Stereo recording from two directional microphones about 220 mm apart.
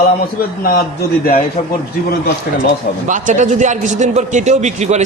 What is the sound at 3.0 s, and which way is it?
A man's voice, 35° right (ahead or behind).